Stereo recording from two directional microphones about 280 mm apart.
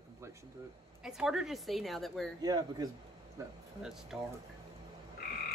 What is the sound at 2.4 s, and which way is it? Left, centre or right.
Speech, centre.